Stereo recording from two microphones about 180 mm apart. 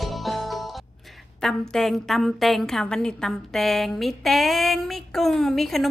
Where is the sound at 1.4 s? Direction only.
5° left (ahead or behind).